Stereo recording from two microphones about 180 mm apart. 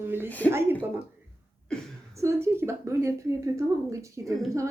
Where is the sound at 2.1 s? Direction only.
15° right (ahead or behind).